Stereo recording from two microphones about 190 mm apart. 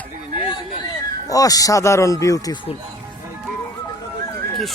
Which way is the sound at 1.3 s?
20° left (ahead or behind).